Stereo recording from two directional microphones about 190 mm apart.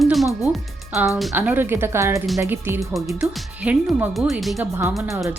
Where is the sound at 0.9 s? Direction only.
15° right (ahead or behind).